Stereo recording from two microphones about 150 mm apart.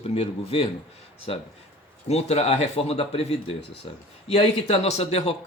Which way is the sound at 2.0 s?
45° left (ahead or behind).